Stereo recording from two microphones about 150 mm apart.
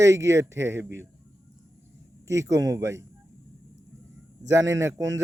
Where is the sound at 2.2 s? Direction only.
20° right (ahead or behind).